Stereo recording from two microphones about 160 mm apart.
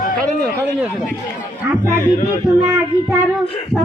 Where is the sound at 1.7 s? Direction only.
15° right (ahead or behind).